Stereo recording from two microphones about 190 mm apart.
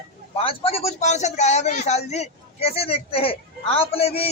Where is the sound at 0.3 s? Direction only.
30° left (ahead or behind).